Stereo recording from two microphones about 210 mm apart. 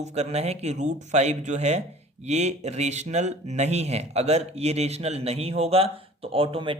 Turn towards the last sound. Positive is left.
turn(degrees=-25)  # may be behind; listen again after turning